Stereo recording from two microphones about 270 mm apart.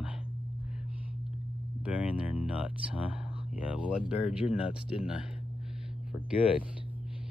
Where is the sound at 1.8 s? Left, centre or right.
Centre.